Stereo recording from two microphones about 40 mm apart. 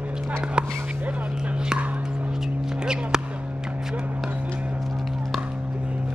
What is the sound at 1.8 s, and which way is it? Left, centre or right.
Whispering, right.